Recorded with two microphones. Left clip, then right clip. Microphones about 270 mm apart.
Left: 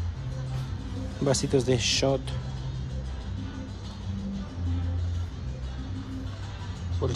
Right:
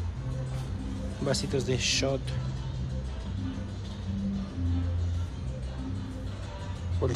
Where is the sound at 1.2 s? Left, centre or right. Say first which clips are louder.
Left 5 dB; centre.